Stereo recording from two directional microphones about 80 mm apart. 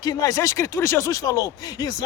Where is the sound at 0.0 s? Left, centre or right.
Left.